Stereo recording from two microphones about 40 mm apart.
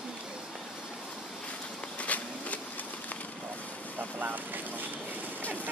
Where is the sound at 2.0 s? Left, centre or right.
Left.